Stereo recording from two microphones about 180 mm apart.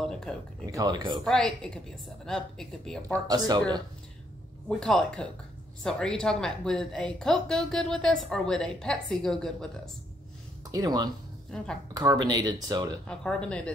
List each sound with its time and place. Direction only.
0.0 s a sound: 5° left (ahead or behind)
0.7 s speech: 20° right (ahead or behind)
1.2 s a woman's voice: 5° left (ahead or behind)
3.3 s speech: 25° right (ahead or behind)
4.6 s a woman's voice: 5° left (ahead or behind)
10.7 s speech: 20° right (ahead or behind)
11.5 s a woman's voice: 5° left (ahead or behind)
11.9 s speech: 20° right (ahead or behind)
13.0 s a woman's voice: 5° left (ahead or behind)